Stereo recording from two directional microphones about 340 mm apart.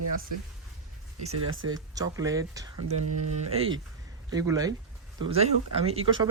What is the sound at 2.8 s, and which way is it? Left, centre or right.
Speech, right.